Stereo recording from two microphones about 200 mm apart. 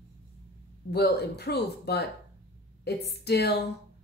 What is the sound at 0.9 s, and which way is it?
A woman's voice, 55° left (ahead or behind).